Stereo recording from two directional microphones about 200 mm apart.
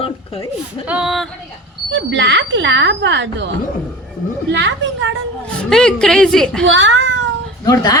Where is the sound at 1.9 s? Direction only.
65° right (ahead or behind).